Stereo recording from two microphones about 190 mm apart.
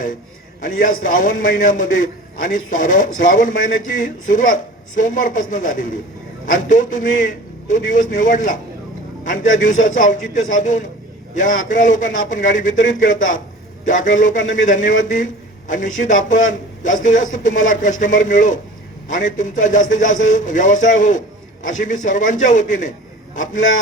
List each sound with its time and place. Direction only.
0.6 s a man's voice: 45° left (ahead or behind)